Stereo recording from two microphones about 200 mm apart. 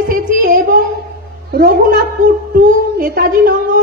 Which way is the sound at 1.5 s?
50° right (ahead or behind).